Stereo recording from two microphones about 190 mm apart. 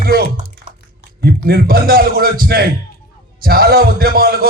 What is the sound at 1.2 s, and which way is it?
A man's voice, 55° right (ahead or behind).